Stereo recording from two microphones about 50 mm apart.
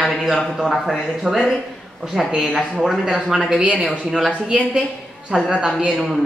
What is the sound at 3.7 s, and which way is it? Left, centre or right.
A woman's voice, right.